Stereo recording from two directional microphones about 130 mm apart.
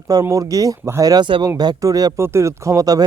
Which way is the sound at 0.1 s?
25° right (ahead or behind).